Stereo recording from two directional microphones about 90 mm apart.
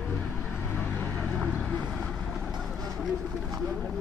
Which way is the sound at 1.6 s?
10° left (ahead or behind).